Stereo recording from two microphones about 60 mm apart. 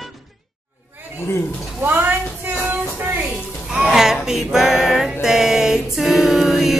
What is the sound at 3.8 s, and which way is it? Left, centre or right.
Music, centre.